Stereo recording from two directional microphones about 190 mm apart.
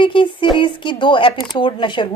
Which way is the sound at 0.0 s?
25° left (ahead or behind).